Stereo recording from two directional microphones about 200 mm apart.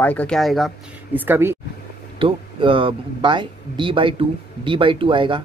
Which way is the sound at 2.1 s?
25° right (ahead or behind).